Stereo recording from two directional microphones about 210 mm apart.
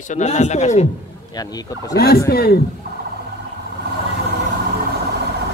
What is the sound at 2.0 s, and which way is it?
Speech, 45° left (ahead or behind).